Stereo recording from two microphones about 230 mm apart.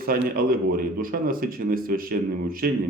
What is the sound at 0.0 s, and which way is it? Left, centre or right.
Speech, right.